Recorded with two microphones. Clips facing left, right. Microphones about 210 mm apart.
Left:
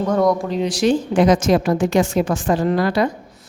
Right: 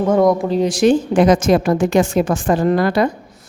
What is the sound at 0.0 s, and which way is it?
Speech, 25° right (ahead or behind).